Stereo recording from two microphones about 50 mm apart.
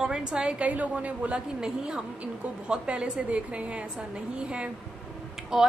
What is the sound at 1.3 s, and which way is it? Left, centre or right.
A woman's voice, centre.